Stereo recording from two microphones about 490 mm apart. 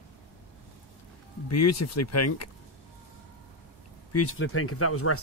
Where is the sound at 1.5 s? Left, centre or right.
Left.